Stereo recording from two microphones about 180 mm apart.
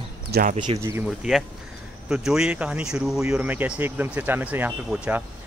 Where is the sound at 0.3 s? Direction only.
55° right (ahead or behind).